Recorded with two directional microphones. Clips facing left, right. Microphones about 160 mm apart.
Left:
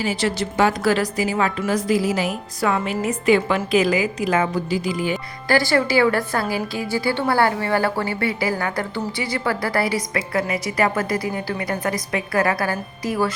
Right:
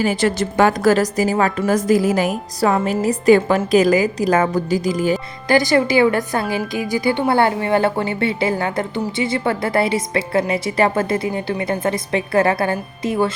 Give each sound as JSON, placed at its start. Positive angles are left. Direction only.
{"t": 0.0, "sound": "a woman's voice", "side_deg": -50}
{"t": 2.6, "sound": "a woman's voice", "side_deg": -35}
{"t": 5.5, "sound": "a woman's voice", "side_deg": -20}